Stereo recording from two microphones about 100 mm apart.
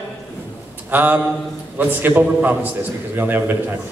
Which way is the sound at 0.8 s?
20° right (ahead or behind).